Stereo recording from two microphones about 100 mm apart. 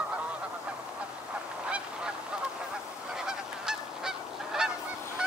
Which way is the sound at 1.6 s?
10° right (ahead or behind).